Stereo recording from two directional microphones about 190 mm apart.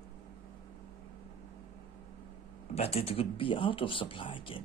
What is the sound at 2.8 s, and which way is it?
Speech, 30° left (ahead or behind).